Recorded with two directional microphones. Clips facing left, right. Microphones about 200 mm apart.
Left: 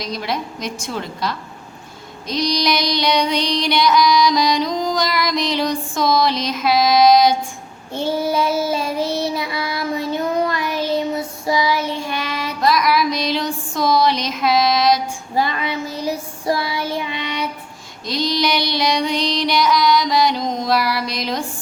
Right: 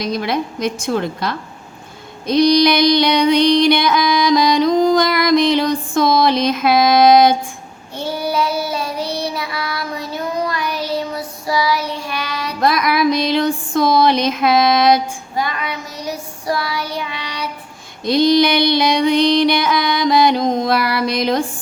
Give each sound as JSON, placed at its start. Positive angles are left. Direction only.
{"t": 0.0, "sound": "a woman's voice", "side_deg": -55}
{"t": 2.2, "sound": "female singing", "side_deg": -55}
{"t": 7.9, "sound": "child singing", "side_deg": 25}
{"t": 12.6, "sound": "music", "side_deg": -55}
{"t": 15.4, "sound": "child singing", "side_deg": 25}
{"t": 18.0, "sound": "female singing", "side_deg": -55}